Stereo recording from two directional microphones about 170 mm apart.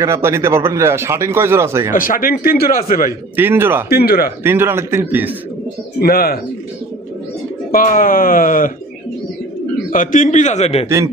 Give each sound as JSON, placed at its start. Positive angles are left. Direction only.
{"t": 0.0, "sound": "speech", "side_deg": -15}
{"t": 1.9, "sound": "speech", "side_deg": 55}
{"t": 3.1, "sound": "speech", "side_deg": -15}
{"t": 3.9, "sound": "speech", "side_deg": 65}
{"t": 4.4, "sound": "speech", "side_deg": -15}
{"t": 5.9, "sound": "speech", "side_deg": 60}
{"t": 7.7, "sound": "speech", "side_deg": 55}
{"t": 9.8, "sound": "a man's voice", "side_deg": 50}